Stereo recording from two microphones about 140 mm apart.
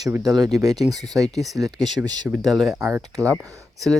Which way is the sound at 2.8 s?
20° right (ahead or behind).